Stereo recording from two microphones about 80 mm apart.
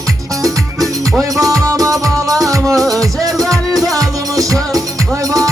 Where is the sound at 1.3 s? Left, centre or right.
Right.